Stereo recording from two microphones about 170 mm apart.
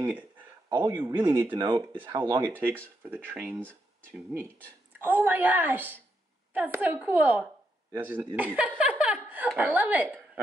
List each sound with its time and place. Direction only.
0.7 s a woman's voice: 15° right (ahead or behind)
1.5 s speech: 25° right (ahead or behind)
2.2 s a woman's voice: 15° right (ahead or behind)
4.9 s a woman's voice: 10° right (ahead or behind)
8.4 s chuckle: 10° right (ahead or behind)
9.5 s speech: centre (ahead or behind)
9.8 s speech: 10° right (ahead or behind)